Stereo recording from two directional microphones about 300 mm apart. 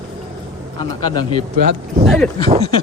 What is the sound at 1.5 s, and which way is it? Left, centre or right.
Speech, right.